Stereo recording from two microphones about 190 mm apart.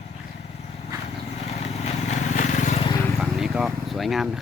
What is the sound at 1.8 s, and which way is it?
Vehicle, 40° left (ahead or behind).